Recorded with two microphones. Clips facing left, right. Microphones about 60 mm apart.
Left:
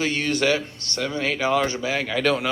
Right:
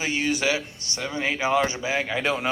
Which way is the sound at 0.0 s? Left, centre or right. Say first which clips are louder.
Left 2 dB; centre.